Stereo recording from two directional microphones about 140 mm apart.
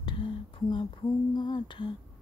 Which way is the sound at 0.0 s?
35° left (ahead or behind).